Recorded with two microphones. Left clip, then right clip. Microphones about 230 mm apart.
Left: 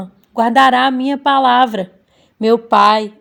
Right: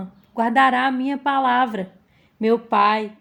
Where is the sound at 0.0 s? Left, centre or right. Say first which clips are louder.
Left 7 dB; left.